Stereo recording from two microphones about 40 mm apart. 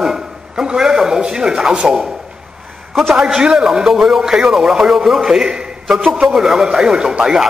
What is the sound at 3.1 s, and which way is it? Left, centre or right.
A man's voice, centre.